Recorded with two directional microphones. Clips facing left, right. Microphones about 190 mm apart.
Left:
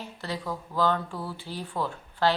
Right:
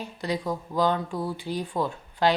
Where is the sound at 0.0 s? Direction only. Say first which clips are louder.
Right 5 dB; 15° right (ahead or behind).